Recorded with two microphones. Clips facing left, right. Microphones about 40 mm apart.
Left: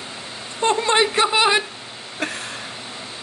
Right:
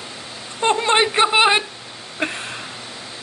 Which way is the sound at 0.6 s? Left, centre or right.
Right.